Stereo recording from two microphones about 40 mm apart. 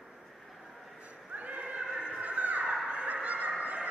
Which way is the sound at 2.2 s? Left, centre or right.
Right.